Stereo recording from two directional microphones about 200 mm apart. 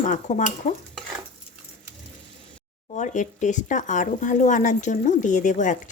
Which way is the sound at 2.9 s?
40° left (ahead or behind).